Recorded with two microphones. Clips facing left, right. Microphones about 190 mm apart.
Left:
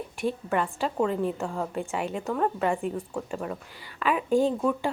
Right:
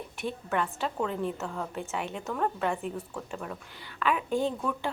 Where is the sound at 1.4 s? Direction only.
15° left (ahead or behind).